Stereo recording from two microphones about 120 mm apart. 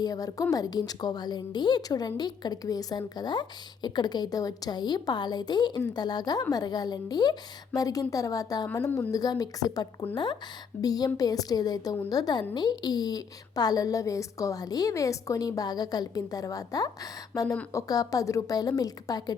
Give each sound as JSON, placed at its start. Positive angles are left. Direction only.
{"t": 0.0, "sound": "a woman's voice", "side_deg": 30}